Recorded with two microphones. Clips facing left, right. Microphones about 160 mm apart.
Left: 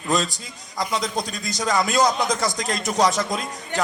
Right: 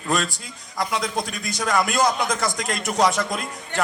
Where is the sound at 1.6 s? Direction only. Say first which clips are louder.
Left 1 dB; 5° right (ahead or behind).